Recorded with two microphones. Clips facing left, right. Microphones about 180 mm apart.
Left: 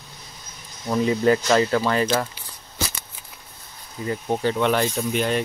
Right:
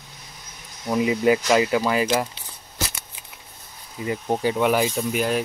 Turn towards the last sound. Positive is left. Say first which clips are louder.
# even
turn(degrees=-5)  # may be behind; listen again after turning